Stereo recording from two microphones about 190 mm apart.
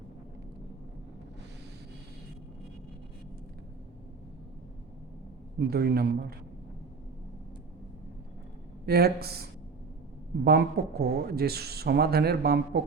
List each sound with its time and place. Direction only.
5.5 s speech: 55° right (ahead or behind)
8.9 s speech: 55° right (ahead or behind)